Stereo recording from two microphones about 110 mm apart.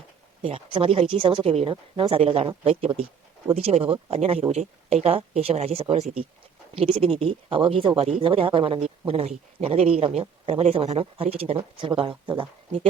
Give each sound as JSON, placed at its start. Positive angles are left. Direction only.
{"t": 0.4, "sound": "speech", "side_deg": -55}
{"t": 6.7, "sound": "speech", "side_deg": -55}
{"t": 9.0, "sound": "speech", "side_deg": -65}